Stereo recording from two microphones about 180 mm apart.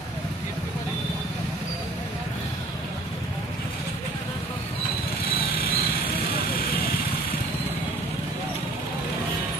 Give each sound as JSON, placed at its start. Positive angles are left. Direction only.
{"t": 5.4, "sound": "vehicle", "side_deg": 55}